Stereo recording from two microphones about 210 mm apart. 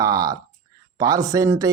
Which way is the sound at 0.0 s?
15° right (ahead or behind).